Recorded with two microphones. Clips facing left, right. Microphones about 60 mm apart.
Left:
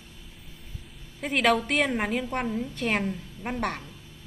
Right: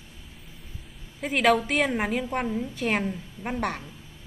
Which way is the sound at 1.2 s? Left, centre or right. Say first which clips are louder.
Right 2 dB; centre.